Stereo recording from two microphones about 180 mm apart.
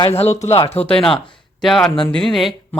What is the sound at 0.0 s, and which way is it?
Speech, 35° left (ahead or behind).